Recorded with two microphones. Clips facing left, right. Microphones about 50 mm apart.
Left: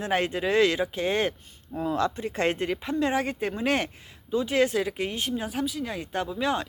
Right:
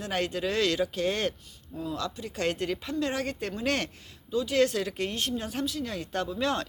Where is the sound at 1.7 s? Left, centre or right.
Left.